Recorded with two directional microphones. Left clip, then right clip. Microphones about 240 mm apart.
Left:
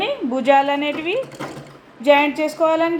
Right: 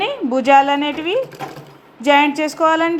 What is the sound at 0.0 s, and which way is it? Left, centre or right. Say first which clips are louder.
A woman's voice: right 2 dB; right.